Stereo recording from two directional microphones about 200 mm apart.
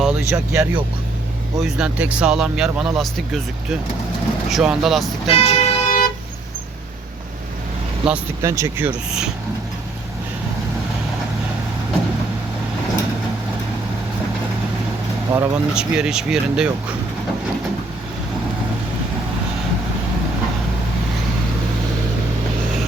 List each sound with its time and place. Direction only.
0.0 s speech: 10° right (ahead or behind)
5.3 s vehicle: 30° left (ahead or behind)
8.0 s speech: 10° right (ahead or behind)
15.3 s speech: 15° right (ahead or behind)